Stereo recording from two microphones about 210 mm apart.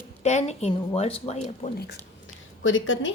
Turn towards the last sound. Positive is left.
turn(degrees=65)  # may be behind; listen again after turning